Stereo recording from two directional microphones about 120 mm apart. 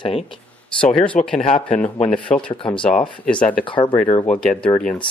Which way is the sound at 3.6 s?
45° left (ahead or behind).